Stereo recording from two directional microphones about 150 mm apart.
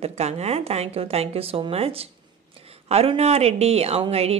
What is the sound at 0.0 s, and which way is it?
A woman's voice, 45° right (ahead or behind).